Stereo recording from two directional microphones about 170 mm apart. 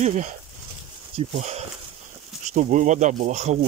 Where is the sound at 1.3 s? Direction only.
40° right (ahead or behind).